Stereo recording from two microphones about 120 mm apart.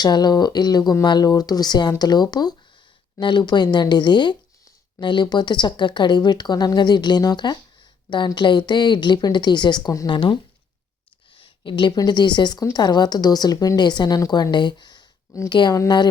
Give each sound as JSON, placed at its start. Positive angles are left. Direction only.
{"t": 0.0, "sound": "speech", "side_deg": 35}
{"t": 10.1, "sound": "speech", "side_deg": 40}
{"t": 11.3, "sound": "a woman's voice", "side_deg": 40}